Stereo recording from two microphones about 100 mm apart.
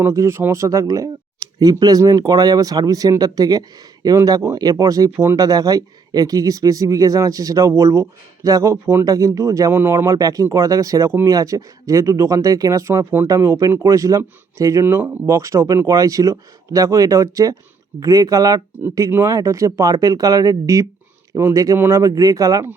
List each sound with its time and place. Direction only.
0.0 s speech: 30° right (ahead or behind)
5.1 s speech: 25° right (ahead or behind)
5.4 s speech: 40° right (ahead or behind)
9.7 s speech: 25° right (ahead or behind)
14.8 s speech: 20° right (ahead or behind)
15.3 s speech: 30° right (ahead or behind)